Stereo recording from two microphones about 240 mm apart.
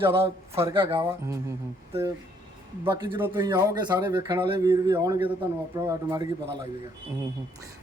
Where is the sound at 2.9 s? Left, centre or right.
Centre.